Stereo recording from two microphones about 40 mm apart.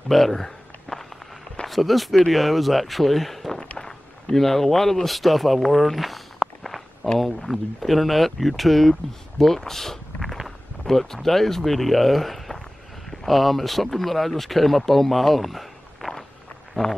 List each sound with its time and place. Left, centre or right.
0.1 s walk: centre
1.7 s speech: centre
3.7 s a sound: centre
7.2 s speech: centre
16.8 s speech: centre